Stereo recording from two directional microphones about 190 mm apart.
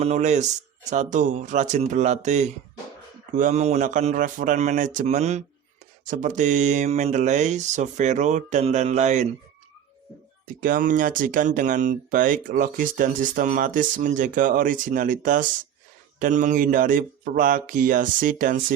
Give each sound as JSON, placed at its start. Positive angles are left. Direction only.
{"t": 0.0, "sound": "speech", "side_deg": -35}
{"t": 10.6, "sound": "speech", "side_deg": -45}